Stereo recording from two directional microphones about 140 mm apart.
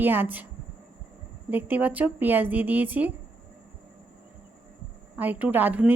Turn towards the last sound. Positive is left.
turn(degrees=-10)  # may be behind; listen again after turning